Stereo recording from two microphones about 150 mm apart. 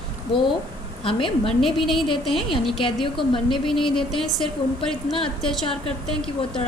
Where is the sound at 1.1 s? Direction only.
35° left (ahead or behind).